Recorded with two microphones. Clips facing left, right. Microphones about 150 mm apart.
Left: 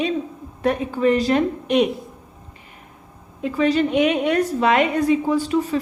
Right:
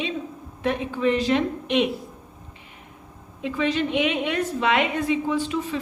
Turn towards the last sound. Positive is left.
turn(degrees=40)  # may be behind; listen again after turning